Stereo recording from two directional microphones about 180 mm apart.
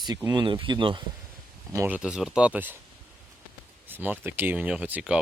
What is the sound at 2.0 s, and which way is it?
Speech, 5° right (ahead or behind).